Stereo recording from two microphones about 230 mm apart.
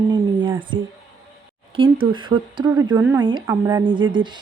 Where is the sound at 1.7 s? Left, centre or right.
Right.